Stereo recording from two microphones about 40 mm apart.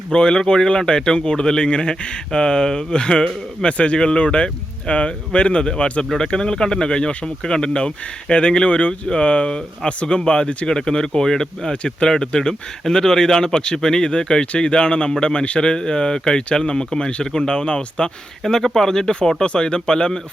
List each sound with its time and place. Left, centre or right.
0.1 s speech: left
18.6 s speech: centre